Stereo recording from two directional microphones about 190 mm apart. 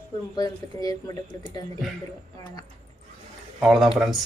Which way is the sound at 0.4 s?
20° left (ahead or behind).